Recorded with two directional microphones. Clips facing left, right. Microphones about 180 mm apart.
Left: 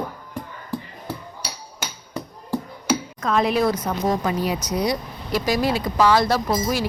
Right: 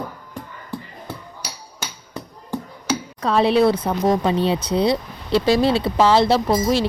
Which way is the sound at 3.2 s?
30° right (ahead or behind).